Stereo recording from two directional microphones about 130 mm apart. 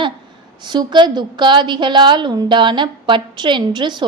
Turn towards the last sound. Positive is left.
turn(degrees=-35)  # may be behind; listen again after turning